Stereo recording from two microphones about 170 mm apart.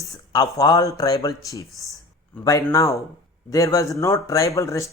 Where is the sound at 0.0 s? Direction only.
20° left (ahead or behind).